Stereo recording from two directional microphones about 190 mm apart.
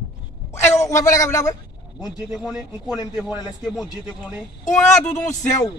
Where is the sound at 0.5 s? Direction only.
15° left (ahead or behind).